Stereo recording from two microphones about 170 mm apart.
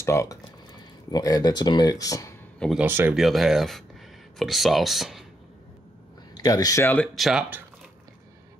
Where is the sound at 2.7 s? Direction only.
10° right (ahead or behind).